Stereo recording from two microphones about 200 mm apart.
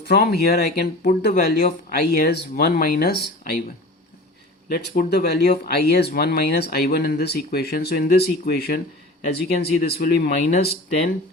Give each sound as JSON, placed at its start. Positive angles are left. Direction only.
{"t": 0.0, "sound": "speech", "side_deg": 55}
{"t": 1.0, "sound": "speech", "side_deg": 45}
{"t": 4.7, "sound": "speech", "side_deg": 50}